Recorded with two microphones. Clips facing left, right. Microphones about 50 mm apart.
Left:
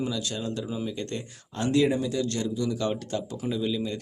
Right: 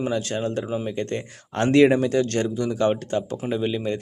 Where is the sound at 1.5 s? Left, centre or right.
Right.